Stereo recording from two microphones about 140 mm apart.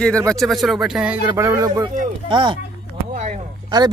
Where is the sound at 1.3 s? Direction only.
20° right (ahead or behind).